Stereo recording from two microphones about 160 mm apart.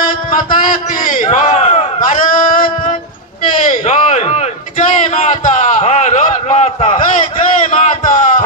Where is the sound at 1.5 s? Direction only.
40° left (ahead or behind).